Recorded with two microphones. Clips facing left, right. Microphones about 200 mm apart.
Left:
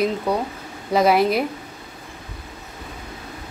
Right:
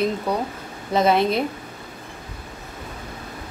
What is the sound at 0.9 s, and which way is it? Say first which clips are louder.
Speech: left 2 dB; 5° left (ahead or behind).